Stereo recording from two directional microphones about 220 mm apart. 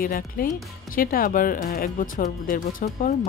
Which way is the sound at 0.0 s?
40° left (ahead or behind).